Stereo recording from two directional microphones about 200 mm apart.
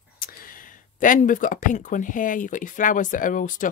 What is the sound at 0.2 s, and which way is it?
Speech, 45° left (ahead or behind).